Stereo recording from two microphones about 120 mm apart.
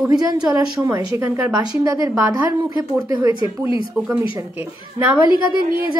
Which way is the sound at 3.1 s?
40° right (ahead or behind).